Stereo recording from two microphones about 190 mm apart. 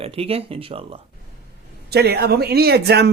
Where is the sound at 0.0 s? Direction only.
30° right (ahead or behind).